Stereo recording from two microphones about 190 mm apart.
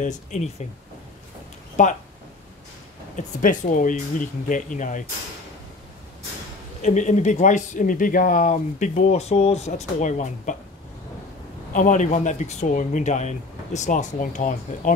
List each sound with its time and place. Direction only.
0.0 s speech: 40° left (ahead or behind)
1.8 s speech: 35° left (ahead or behind)
3.2 s speech: 45° left (ahead or behind)
6.8 s speech: 40° left (ahead or behind)
11.7 s speech: 40° left (ahead or behind)